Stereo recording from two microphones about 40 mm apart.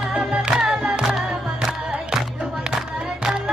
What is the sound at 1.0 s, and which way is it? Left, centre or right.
Music, centre.